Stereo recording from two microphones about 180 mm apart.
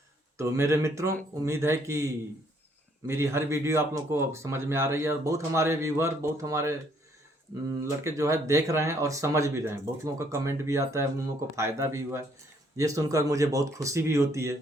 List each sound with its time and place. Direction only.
0.3 s speech: 15° right (ahead or behind)
3.1 s speech: 15° right (ahead or behind)
7.8 s speech: 15° right (ahead or behind)